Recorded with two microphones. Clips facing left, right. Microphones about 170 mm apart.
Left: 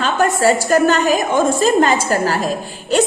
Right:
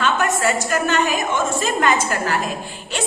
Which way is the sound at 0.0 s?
35° left (ahead or behind).